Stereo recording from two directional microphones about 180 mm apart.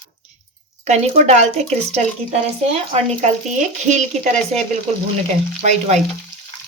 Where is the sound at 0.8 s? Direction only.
40° right (ahead or behind).